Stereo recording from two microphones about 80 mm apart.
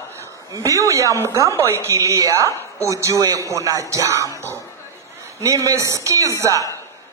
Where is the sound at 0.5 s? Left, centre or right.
Right.